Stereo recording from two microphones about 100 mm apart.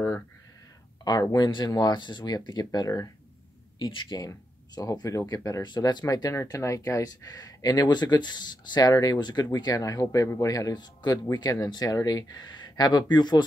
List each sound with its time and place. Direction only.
1.0 s speech: 40° left (ahead or behind)